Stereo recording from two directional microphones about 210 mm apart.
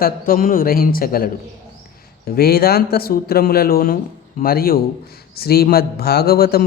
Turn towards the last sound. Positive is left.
turn(degrees=45)  # may be behind; listen again after turning